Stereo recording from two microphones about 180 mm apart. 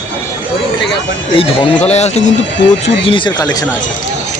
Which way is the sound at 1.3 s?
30° left (ahead or behind).